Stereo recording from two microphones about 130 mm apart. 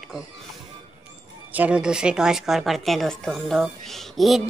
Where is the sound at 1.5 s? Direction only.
10° right (ahead or behind).